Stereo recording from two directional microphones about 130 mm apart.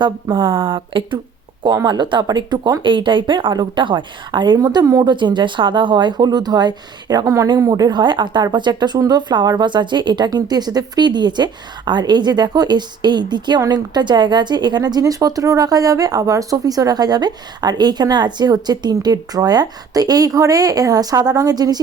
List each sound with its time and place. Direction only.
0.0 s speech: 40° right (ahead or behind)